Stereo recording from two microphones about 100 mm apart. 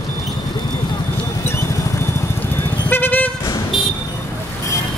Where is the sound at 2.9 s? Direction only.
20° left (ahead or behind).